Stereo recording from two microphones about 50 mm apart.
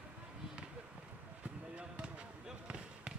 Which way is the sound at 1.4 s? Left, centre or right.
Right.